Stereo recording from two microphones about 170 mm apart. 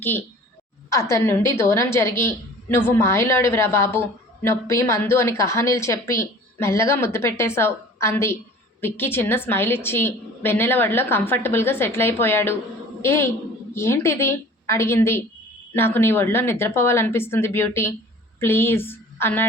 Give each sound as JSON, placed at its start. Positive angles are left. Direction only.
{"t": 0.9, "sound": "a woman's voice", "side_deg": 15}